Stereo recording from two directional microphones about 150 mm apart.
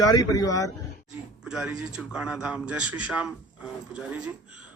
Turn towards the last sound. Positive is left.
turn(degrees=-10)  # may be behind; listen again after turning